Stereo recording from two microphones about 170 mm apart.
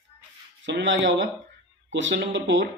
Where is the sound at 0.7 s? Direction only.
85° right.